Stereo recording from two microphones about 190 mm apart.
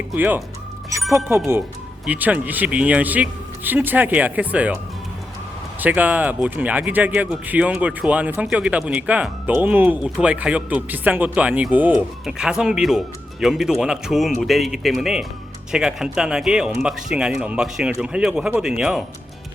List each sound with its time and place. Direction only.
0.1 s speech: 10° right (ahead or behind)
0.9 s music: 15° right (ahead or behind)
1.3 s speech: 15° right (ahead or behind)
5.8 s speech: 10° right (ahead or behind)